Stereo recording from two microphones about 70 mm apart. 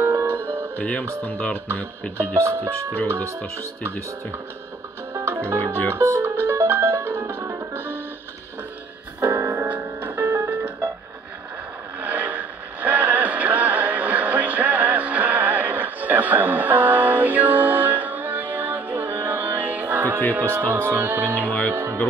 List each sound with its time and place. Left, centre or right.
0.0 s music: right
0.7 s speech: centre
2.4 s speech: right
3.3 s speech: centre
5.2 s music: right
9.3 s music: right
9.7 s music: right
10.1 s music: right
10.5 s music: centre
12.0 s a sound: right
20.9 s music: right
21.4 s speech: centre